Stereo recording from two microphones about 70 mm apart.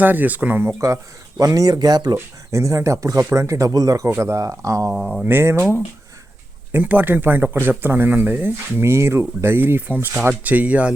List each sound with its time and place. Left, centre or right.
0.0 s speech: right
1.4 s speech: right
2.5 s speech: right
3.7 s speech: right
4.9 s speech: centre
5.2 s speech: right
6.7 s speech: right